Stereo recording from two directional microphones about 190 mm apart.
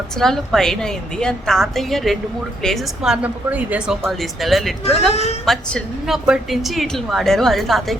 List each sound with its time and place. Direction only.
0.2 s a woman's voice: centre (ahead or behind)
4.9 s a woman's voice: 35° left (ahead or behind)
5.5 s a woman's voice: centre (ahead or behind)